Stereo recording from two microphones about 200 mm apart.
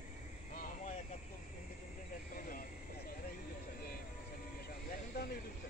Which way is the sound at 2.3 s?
45° left (ahead or behind).